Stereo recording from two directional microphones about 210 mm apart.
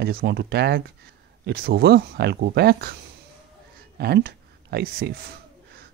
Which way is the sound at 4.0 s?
50° right (ahead or behind).